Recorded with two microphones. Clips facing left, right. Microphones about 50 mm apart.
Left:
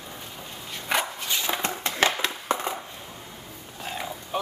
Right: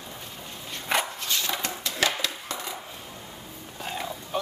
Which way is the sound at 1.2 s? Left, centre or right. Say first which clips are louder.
Left 1 dB; centre.